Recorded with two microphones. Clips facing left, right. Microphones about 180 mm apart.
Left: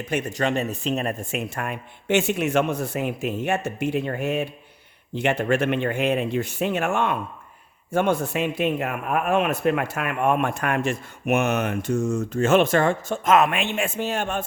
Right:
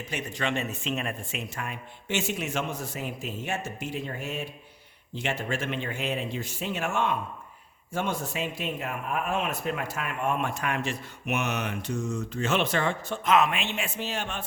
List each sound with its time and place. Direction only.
0.1 s speech: 45° left (ahead or behind)